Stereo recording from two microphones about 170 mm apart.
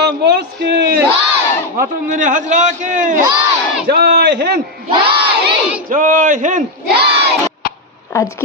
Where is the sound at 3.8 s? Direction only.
75° right (ahead or behind).